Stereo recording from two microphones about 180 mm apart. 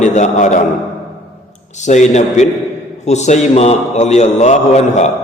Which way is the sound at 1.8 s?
40° left (ahead or behind).